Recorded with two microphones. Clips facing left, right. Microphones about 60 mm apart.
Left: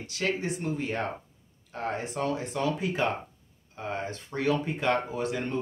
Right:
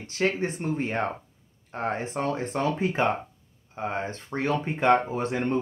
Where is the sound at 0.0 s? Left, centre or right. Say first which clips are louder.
Right 4 dB; right.